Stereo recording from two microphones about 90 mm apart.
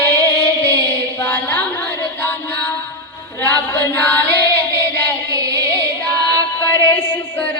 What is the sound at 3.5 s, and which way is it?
Female singing, 20° left (ahead or behind).